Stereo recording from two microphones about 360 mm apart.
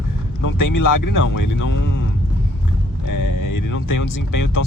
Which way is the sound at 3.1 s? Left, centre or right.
Left.